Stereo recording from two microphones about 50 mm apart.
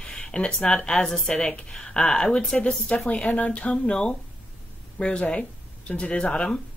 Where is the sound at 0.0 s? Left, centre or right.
Centre.